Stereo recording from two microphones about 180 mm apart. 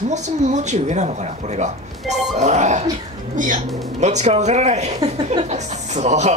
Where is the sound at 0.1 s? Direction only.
40° right (ahead or behind).